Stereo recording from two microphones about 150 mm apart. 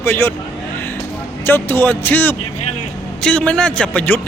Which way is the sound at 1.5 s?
15° left (ahead or behind).